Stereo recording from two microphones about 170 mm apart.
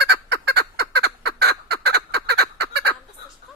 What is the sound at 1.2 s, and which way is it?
Fowl, 75° right (ahead or behind).